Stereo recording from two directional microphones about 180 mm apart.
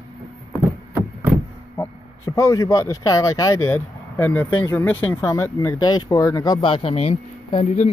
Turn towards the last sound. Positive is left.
turn(degrees=40)  # may be behind; listen again after turning